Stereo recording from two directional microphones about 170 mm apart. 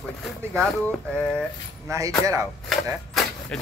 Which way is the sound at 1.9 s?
20° right (ahead or behind).